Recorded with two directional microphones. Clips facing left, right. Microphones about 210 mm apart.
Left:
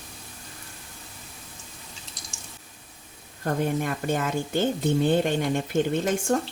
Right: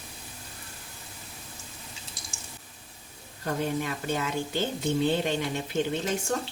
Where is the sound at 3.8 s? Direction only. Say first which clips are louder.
Left 3 dB; 50° left (ahead or behind).